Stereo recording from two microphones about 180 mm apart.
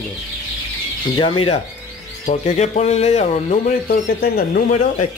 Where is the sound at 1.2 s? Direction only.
30° left (ahead or behind).